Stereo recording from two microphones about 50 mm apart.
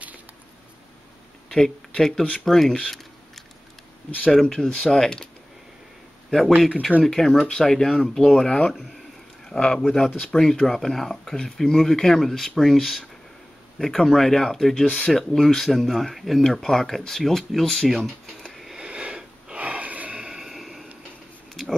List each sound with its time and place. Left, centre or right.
1.5 s speech: centre
4.3 s speech: centre
7.1 s speech: centre
8.3 s speech: left
9.5 s speech: centre
14.9 s speech: left
15.1 s speech: centre
18.7 s sniff: centre
20.2 s a sound: centre